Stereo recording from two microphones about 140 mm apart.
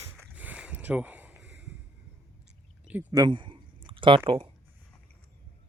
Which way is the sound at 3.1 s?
30° right (ahead or behind).